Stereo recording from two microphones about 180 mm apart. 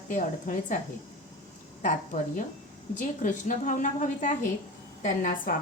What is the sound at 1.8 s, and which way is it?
A woman's voice, 45° left (ahead or behind).